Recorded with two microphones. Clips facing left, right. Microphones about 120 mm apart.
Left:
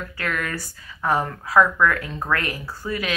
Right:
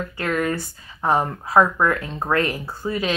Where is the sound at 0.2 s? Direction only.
25° right (ahead or behind).